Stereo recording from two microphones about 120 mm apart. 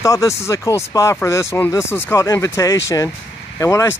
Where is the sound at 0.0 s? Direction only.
30° left (ahead or behind).